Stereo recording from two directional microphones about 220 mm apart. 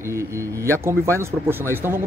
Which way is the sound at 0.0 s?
10° right (ahead or behind).